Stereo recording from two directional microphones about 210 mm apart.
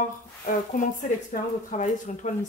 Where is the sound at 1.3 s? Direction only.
35° left (ahead or behind).